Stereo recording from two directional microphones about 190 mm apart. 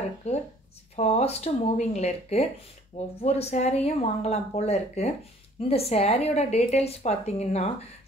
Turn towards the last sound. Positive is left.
turn(degrees=35)  # may be behind; listen again after turning